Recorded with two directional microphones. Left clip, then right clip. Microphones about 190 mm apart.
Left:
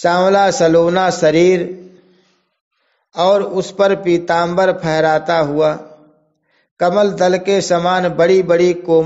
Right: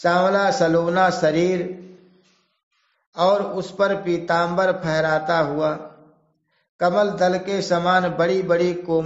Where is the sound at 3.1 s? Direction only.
35° left (ahead or behind).